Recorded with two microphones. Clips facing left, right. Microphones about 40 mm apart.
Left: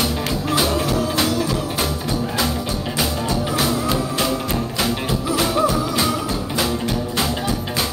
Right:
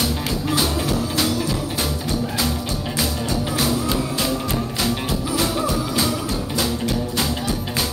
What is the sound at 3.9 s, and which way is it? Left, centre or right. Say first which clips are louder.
Music: left 2 dB; centre.